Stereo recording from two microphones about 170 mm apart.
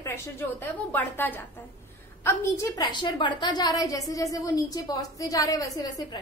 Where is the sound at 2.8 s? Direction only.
25° left (ahead or behind).